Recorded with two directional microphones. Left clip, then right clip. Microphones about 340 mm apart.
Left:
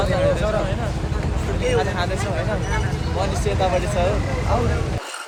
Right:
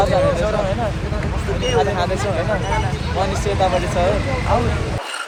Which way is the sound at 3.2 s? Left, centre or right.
Centre.